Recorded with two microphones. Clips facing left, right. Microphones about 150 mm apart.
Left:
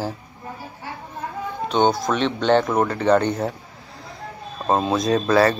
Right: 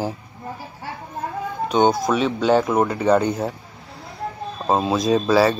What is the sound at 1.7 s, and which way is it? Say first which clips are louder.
Speech: right 2 dB; 10° right (ahead or behind).